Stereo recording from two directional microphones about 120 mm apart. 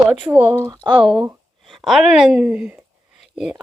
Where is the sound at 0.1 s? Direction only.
10° right (ahead or behind).